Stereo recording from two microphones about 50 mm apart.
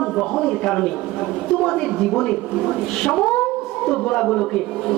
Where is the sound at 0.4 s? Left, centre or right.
Centre.